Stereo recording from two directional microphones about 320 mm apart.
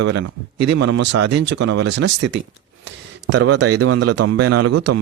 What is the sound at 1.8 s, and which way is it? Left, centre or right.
Speech, right.